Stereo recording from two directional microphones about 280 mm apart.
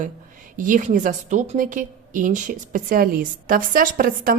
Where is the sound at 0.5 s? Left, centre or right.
Right.